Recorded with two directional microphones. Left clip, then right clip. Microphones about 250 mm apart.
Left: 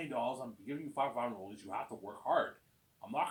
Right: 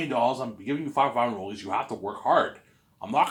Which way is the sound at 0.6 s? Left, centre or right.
Right.